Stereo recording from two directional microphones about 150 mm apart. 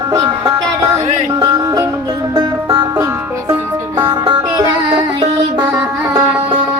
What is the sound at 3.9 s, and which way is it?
Music, 30° right (ahead or behind).